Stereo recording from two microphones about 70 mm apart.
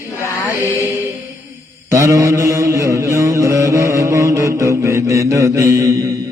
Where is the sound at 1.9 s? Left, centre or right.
Right.